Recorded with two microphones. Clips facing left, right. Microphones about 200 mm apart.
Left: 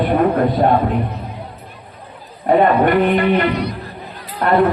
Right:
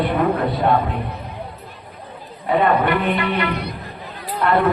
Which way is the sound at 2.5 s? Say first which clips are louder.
Left 4 dB; 45° left (ahead or behind).